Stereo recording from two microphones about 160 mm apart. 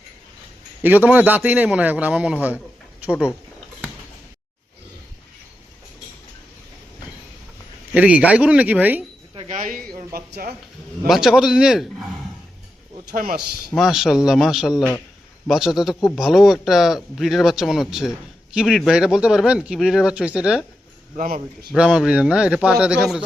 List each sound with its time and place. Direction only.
0.8 s a man's voice: 10° right (ahead or behind)
7.9 s a man's voice: 10° right (ahead or behind)
9.5 s speech: 55° right (ahead or behind)
10.2 s speech: 70° right (ahead or behind)
11.0 s speech: centre (ahead or behind)
13.1 s speech: 60° right (ahead or behind)
13.7 s speech: centre (ahead or behind)
21.2 s speech: 60° right (ahead or behind)
21.8 s speech: 5° right (ahead or behind)